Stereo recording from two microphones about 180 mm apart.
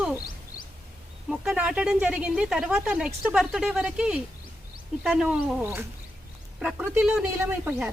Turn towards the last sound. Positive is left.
turn(degrees=-10)  # may be behind; listen again after turning